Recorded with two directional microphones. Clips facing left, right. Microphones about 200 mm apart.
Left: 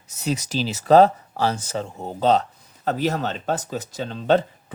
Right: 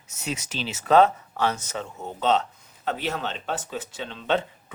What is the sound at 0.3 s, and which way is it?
Speech, 35° left (ahead or behind).